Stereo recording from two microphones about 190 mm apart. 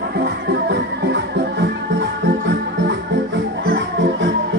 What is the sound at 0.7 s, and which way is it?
Music, 60° right (ahead or behind).